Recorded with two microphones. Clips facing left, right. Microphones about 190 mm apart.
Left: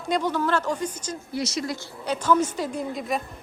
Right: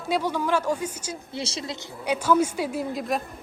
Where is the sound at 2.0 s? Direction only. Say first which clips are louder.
Right 1 dB; 10° right (ahead or behind).